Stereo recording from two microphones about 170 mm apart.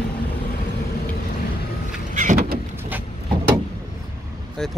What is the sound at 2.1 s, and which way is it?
Vehicle, 55° right (ahead or behind).